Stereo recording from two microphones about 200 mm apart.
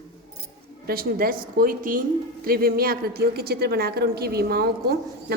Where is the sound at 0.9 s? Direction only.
50° right (ahead or behind).